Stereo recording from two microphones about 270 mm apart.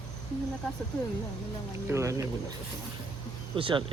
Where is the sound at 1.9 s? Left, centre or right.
Centre.